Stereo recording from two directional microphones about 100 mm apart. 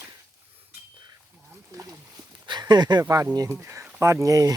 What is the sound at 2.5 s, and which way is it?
Speech, 45° right (ahead or behind).